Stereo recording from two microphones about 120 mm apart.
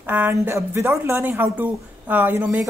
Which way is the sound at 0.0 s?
15° right (ahead or behind).